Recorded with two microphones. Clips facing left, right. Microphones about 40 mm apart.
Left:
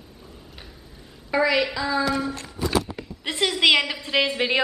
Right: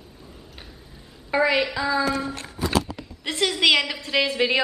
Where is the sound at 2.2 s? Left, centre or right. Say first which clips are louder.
Left 1 dB; right.